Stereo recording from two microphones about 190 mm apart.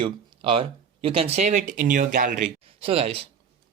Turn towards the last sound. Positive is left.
turn(degrees=-30)  # may be behind; listen again after turning